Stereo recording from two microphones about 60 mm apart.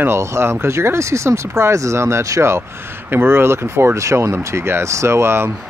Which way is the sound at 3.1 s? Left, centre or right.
Right.